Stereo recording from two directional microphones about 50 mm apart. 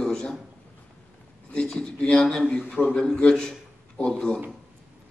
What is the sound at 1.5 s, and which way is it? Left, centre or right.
Speech, centre.